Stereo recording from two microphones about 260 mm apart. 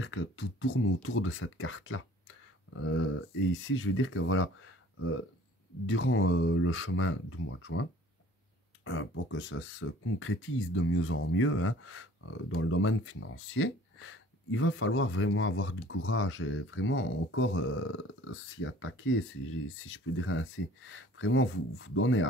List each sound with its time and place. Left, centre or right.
0.0 s speech: left
8.8 s speech: left